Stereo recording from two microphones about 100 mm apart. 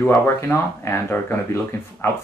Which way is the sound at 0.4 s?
25° left (ahead or behind).